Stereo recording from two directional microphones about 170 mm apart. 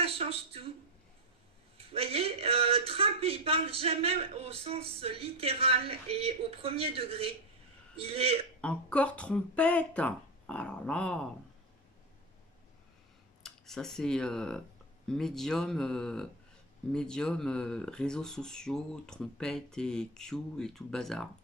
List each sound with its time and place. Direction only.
0.0 s a sound: 35° right (ahead or behind)
1.8 s speech: 35° right (ahead or behind)
8.5 s speech: 5° left (ahead or behind)
13.4 s speech: centre (ahead or behind)